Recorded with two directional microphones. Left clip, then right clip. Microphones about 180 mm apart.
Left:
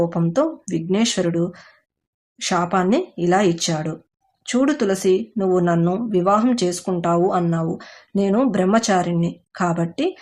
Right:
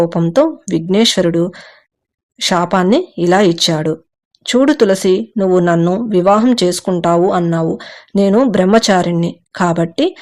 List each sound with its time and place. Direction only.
0.0 s speech: 35° right (ahead or behind)